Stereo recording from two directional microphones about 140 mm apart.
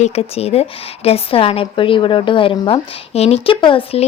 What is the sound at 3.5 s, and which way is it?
Speech, 35° left (ahead or behind).